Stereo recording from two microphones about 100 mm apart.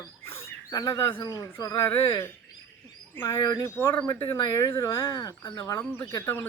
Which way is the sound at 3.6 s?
20° left (ahead or behind).